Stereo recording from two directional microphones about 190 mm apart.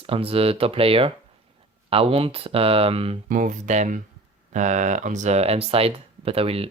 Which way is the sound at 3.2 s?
45° right (ahead or behind).